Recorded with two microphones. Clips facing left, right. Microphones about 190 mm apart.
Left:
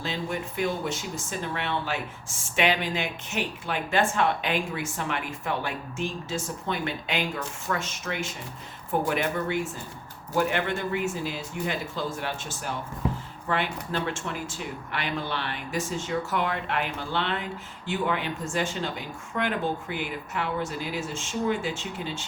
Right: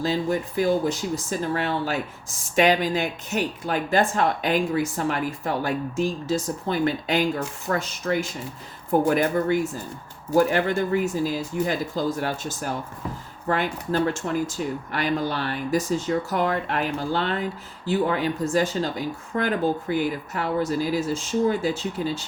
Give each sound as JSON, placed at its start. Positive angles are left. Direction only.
{"t": 0.0, "sound": "speech", "side_deg": -35}